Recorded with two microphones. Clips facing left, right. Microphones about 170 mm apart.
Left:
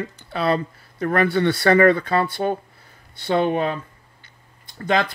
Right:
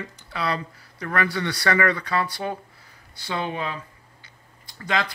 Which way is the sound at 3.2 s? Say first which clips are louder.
Left 9 dB; 50° left (ahead or behind).